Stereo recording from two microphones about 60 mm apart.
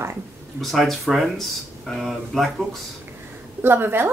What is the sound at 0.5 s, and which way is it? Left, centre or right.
Speech, centre.